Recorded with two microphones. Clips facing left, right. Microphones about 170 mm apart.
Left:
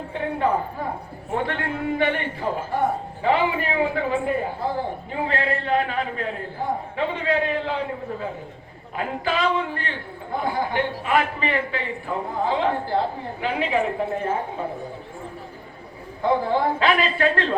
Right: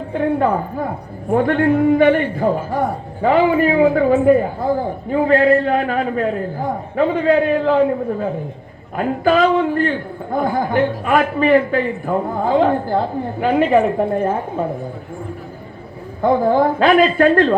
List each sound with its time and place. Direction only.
0.1 s a man's voice: 50° right (ahead or behind)
16.2 s a man's voice: 45° right (ahead or behind)